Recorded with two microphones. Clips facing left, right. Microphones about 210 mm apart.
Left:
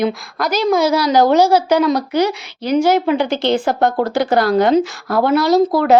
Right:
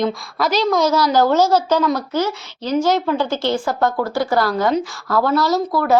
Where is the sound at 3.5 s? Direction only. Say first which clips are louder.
Left 4 dB; 70° left (ahead or behind).